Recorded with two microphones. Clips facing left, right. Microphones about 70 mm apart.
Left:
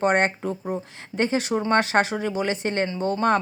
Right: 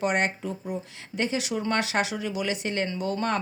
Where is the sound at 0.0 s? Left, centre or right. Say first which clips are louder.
Left 5 dB; left.